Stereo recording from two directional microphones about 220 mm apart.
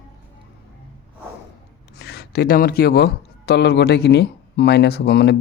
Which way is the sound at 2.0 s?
50° left (ahead or behind).